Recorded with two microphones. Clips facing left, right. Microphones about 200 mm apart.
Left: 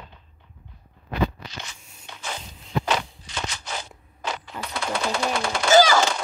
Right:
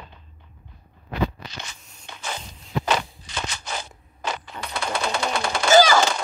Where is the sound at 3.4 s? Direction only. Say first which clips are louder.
Right 1 dB; 55° right (ahead or behind).